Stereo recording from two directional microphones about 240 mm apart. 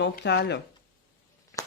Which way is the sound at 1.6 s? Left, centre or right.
Centre.